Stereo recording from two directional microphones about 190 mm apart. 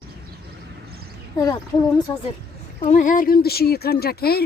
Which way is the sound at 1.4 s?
20° left (ahead or behind).